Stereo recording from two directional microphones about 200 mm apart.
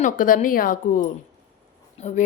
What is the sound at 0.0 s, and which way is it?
A woman's voice, 40° left (ahead or behind).